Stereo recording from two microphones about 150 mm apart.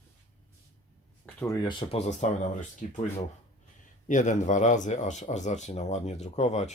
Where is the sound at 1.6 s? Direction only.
45° left (ahead or behind).